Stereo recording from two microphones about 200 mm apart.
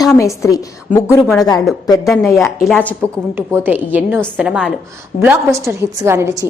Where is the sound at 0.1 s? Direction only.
15° left (ahead or behind).